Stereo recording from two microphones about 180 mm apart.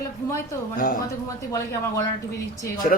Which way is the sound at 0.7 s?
50° left (ahead or behind).